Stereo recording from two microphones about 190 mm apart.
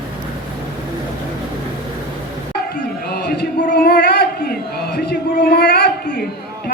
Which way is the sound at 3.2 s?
55° left (ahead or behind).